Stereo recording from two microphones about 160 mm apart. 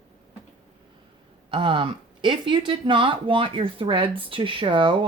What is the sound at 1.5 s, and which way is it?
Speech, 30° right (ahead or behind).